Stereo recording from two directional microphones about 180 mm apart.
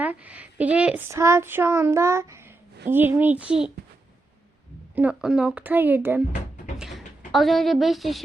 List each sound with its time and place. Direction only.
0.0 s child singing: 10° right (ahead or behind)
4.9 s child singing: 5° right (ahead or behind)
6.7 s a sound: centre (ahead or behind)